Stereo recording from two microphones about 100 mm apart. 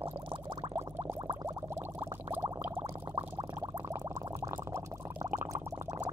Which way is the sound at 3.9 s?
30° right (ahead or behind).